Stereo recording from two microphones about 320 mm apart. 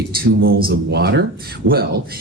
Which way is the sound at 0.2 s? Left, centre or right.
Right.